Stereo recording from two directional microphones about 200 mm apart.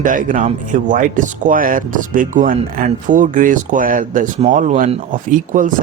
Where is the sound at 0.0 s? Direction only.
40° right (ahead or behind).